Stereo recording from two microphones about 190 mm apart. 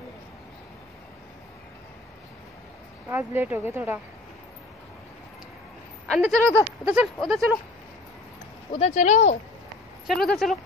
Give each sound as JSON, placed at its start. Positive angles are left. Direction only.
{"t": 3.1, "sound": "speech", "side_deg": -10}
{"t": 6.0, "sound": "speech", "side_deg": 5}
{"t": 8.7, "sound": "speech", "side_deg": 35}
{"t": 10.0, "sound": "speech", "side_deg": 0}